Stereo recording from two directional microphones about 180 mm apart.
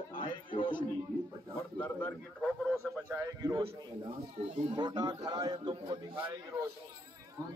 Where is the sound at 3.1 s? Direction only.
15° right (ahead or behind).